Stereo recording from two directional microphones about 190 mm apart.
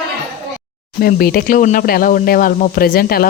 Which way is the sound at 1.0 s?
55° left (ahead or behind).